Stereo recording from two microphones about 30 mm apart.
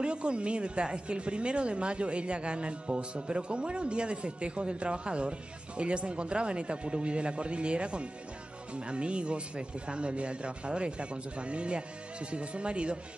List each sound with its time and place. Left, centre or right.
0.0 s a woman's voice: right